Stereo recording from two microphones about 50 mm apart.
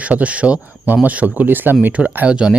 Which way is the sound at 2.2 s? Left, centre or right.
Centre.